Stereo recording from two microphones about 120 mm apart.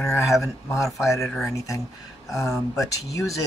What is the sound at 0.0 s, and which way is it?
Speech, 25° left (ahead or behind).